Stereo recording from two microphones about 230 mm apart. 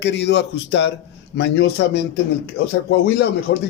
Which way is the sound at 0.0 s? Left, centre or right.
Left.